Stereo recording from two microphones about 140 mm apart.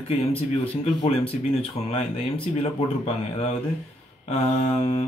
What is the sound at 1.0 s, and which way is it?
Speech, 40° left (ahead or behind).